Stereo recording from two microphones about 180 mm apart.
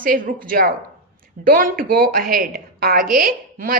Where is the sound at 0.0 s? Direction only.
50° right (ahead or behind).